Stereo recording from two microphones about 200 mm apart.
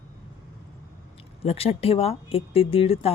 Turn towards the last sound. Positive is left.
turn(degrees=30)  # may be behind; listen again after turning